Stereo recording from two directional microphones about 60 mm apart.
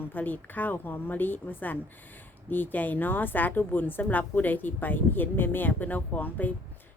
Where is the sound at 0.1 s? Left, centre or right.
Left.